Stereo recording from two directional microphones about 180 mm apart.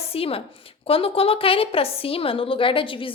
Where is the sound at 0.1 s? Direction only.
30° left (ahead or behind).